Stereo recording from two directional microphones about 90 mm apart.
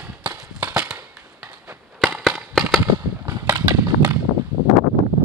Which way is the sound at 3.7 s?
35° right (ahead or behind).